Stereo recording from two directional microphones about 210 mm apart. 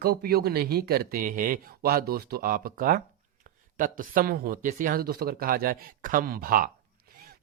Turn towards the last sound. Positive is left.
turn(degrees=-40)  # may be behind; listen again after turning